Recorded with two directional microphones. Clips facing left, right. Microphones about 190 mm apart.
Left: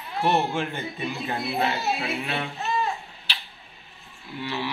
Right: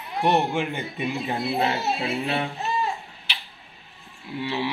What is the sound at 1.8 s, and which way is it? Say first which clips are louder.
Speech: right 2 dB; 35° right (ahead or behind).